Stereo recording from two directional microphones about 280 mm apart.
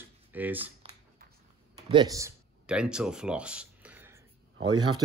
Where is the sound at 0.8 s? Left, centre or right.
Right.